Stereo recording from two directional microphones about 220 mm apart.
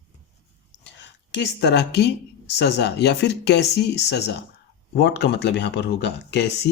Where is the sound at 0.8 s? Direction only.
55° left (ahead or behind).